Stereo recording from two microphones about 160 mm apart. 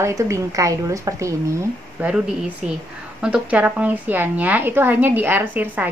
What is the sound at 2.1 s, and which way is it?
A woman's voice, 5° right (ahead or behind).